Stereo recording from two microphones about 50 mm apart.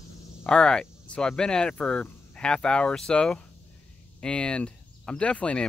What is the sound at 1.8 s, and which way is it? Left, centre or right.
Speech, left.